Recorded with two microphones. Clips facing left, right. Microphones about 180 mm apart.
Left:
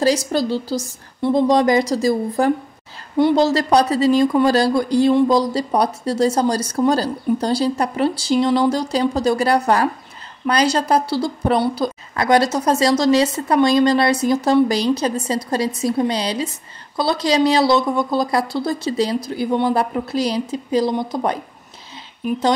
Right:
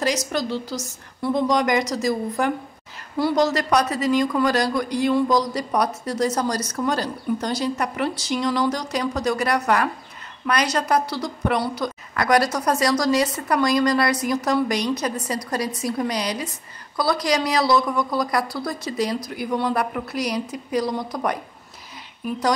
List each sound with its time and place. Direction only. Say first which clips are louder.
0.0 s a woman's voice: left 6 dB; 30° left (ahead or behind)